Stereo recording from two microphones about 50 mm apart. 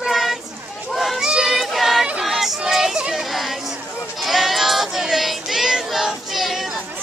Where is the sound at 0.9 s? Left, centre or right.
Centre.